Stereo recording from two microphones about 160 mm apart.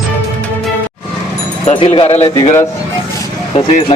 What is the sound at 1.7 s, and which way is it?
Speech, 35° left (ahead or behind).